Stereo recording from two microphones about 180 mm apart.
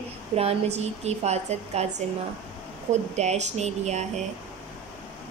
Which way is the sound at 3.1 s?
40° right (ahead or behind).